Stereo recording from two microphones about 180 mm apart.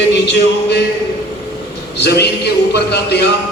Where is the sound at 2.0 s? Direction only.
65° left (ahead or behind).